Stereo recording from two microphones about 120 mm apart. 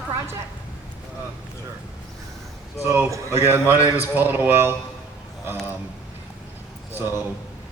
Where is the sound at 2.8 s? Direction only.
20° right (ahead or behind).